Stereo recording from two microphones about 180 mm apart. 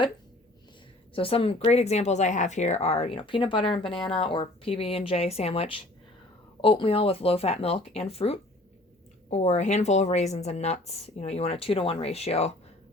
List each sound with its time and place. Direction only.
1.1 s a woman's voice: 30° left (ahead or behind)